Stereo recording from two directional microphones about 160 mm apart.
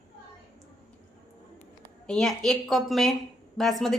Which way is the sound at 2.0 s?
5° left (ahead or behind).